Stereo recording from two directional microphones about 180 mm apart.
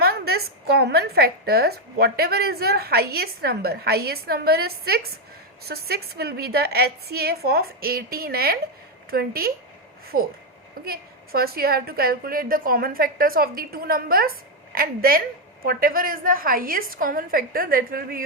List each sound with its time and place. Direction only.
0.0 s a woman's voice: 60° right (ahead or behind)